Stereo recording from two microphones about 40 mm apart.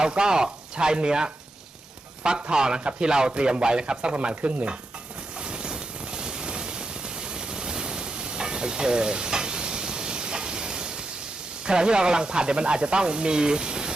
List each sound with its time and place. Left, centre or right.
0.0 s speech: centre
5.4 s vehicle: right
11.6 s speech: right